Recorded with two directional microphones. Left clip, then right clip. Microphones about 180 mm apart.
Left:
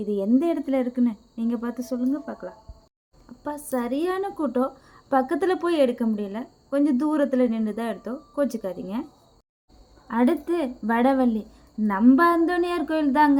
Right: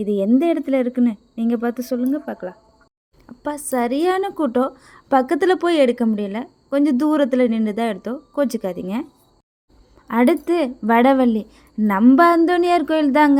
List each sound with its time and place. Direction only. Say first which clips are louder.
0.0 s a woman's voice: right 5 dB; 40° right (ahead or behind)
10.1 s a woman's voice: right 6 dB; 40° right (ahead or behind)